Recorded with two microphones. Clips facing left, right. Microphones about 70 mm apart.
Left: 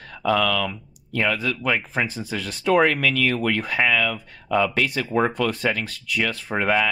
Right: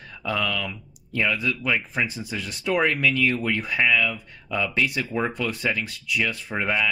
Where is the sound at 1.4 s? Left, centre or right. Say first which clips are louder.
Left 1 dB; left.